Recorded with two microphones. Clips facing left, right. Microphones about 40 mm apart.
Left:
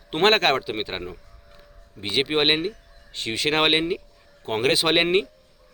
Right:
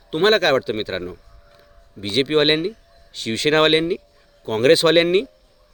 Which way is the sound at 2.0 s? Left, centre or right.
Centre.